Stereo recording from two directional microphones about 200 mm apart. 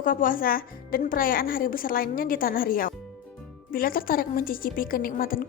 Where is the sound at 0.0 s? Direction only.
45° left (ahead or behind).